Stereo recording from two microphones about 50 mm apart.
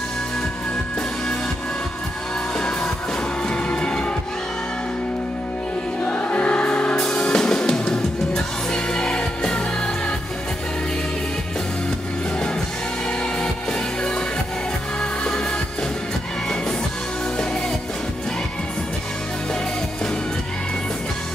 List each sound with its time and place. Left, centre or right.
3.4 s music: centre
6.0 s music: left